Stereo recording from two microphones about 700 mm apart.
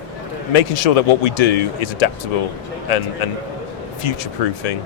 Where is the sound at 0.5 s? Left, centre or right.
Left.